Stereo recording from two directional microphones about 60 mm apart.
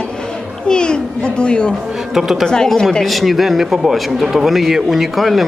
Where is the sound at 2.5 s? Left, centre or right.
Centre.